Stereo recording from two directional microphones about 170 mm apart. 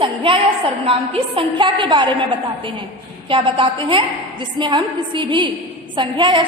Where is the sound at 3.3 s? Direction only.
30° right (ahead or behind).